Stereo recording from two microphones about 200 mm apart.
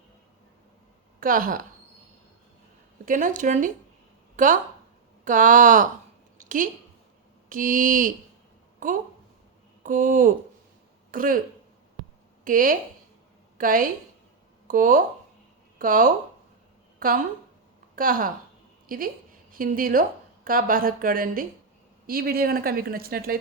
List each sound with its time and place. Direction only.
1.2 s a woman's voice: 45° right (ahead or behind)
3.1 s speech: 40° right (ahead or behind)
6.3 s a sound: 40° right (ahead or behind)
7.5 s a woman's voice: 40° right (ahead or behind)
12.5 s a woman's voice: 45° right (ahead or behind)